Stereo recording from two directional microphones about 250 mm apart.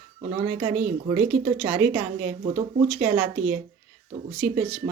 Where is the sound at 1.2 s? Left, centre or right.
Centre.